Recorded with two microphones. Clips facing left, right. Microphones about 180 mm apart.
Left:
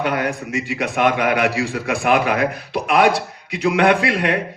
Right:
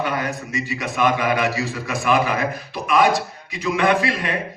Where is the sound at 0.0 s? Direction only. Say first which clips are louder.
Left 3 dB; 75° left (ahead or behind).